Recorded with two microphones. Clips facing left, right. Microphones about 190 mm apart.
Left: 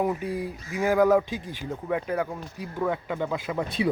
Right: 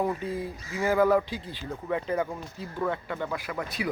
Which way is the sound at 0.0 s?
15° left (ahead or behind).